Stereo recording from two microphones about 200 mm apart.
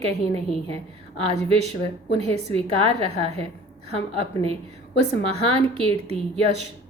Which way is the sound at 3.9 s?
30° right (ahead or behind).